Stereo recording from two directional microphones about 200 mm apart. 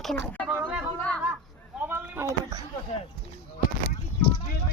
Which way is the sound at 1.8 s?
10° right (ahead or behind).